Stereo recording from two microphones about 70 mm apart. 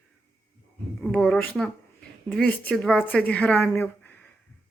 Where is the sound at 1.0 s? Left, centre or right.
Centre.